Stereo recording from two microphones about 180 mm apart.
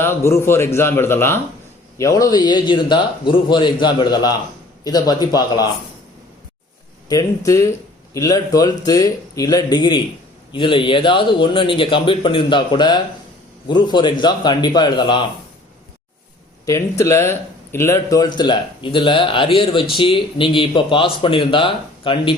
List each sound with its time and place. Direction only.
0.0 s a man's voice: 15° left (ahead or behind)
7.1 s speech: 20° left (ahead or behind)
17.0 s a man's voice: 15° left (ahead or behind)